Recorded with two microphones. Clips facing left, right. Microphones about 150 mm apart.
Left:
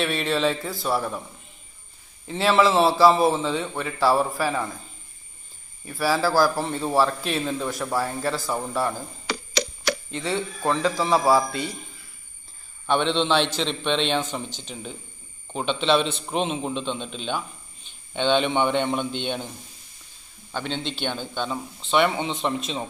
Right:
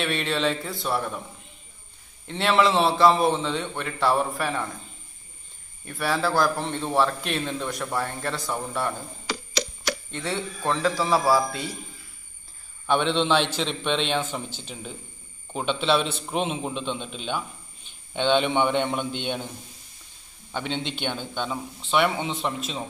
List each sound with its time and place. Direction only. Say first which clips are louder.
0.0 s a man's voice: left 2 dB; centre (ahead or behind)
2.2 s a man's voice: left 2 dB; centre (ahead or behind)
5.9 s a man's voice: left 3 dB; 5° left (ahead or behind)
9.3 s tick-tock: left 2 dB; 65° left (ahead or behind)
10.1 s a man's voice: left 3 dB; centre (ahead or behind)
12.8 s a man's voice: even; 5° right (ahead or behind)
20.5 s a man's voice: even; 15° right (ahead or behind)
21.5 s a man's voice: left 1 dB; 5° right (ahead or behind)